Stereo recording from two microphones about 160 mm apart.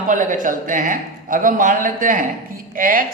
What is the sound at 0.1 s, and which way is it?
A man's voice, 55° right (ahead or behind).